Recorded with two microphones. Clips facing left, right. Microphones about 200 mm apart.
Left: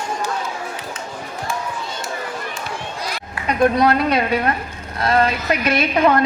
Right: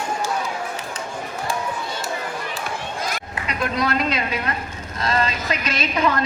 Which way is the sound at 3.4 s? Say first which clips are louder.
Left 10 dB; 20° right (ahead or behind).